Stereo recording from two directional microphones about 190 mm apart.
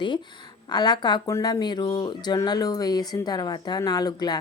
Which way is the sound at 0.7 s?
20° left (ahead or behind).